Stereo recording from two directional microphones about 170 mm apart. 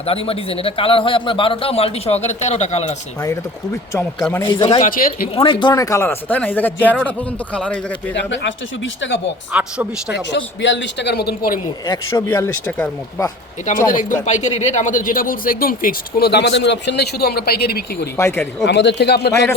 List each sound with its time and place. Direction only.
0.0 s a man's voice: 35° left (ahead or behind)
3.2 s speech: 15° left (ahead or behind)
4.4 s speech: 30° left (ahead or behind)
4.8 s speech: 55° left (ahead or behind)
5.3 s speech: 30° left (ahead or behind); by 7.9 s 5° left (ahead or behind)
8.1 s speech: 90° left
9.5 s speech: 5° right (ahead or behind)
10.1 s a man's voice: 90° left; by 11.6 s 65° left (ahead or behind)
11.9 s speech: 25° left (ahead or behind)
12.3 s speech: 10° left (ahead or behind)
13.7 s speech: 50° left (ahead or behind); by 18.1 s 65° left (ahead or behind)
18.2 s speech: 15° left (ahead or behind)
18.6 s a man's voice: 90° left; by 19.5 s 70° left (ahead or behind)